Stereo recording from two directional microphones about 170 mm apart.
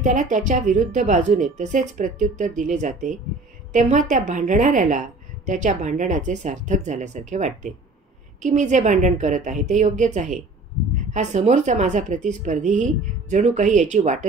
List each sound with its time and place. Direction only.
0.0 s speech: 45° right (ahead or behind)